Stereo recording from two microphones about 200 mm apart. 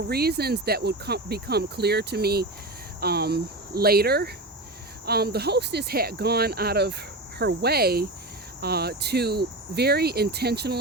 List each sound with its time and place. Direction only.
0.1 s speech: 50° right (ahead or behind)